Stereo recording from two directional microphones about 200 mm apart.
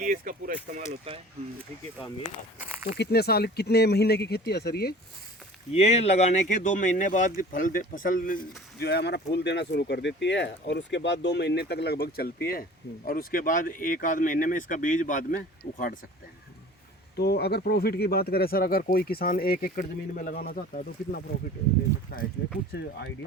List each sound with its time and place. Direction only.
0.0 s speech: 45° right (ahead or behind)
2.6 s a sound: 10° right (ahead or behind)
3.0 s speech: 50° left (ahead or behind)
5.7 s speech: 30° left (ahead or behind)
8.8 s speech: 55° left (ahead or behind)
17.2 s speech: 55° left (ahead or behind)
22.4 s speech: 50° left (ahead or behind)